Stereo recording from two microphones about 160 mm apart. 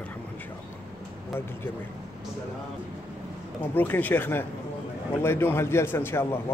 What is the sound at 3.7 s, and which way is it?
A man's voice, 10° left (ahead or behind).